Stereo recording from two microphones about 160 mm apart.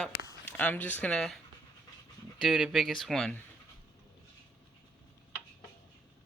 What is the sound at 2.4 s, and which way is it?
Speech, 5° right (ahead or behind).